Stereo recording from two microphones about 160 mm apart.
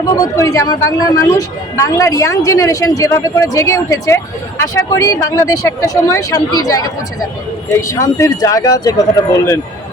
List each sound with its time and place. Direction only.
0.1 s a woman's voice: 20° left (ahead or behind)